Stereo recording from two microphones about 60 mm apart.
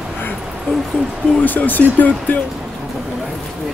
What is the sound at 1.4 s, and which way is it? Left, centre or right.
Speech, left.